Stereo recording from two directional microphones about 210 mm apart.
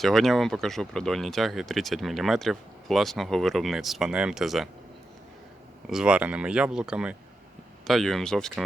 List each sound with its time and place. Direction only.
0.0 s speech: centre (ahead or behind)
5.9 s speech: 5° right (ahead or behind)